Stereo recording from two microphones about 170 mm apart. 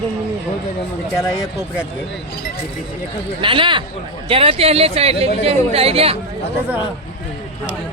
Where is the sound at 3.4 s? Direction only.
30° right (ahead or behind).